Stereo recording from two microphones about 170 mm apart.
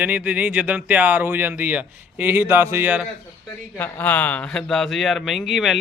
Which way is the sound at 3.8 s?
10° left (ahead or behind).